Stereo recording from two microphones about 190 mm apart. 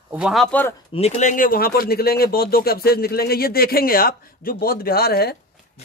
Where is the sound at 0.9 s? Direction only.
35° left (ahead or behind).